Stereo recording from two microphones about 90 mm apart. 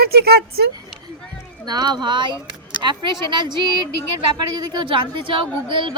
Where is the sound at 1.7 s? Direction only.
50° right (ahead or behind).